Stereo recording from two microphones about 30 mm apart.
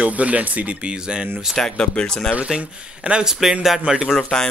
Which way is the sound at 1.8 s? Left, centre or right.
Left.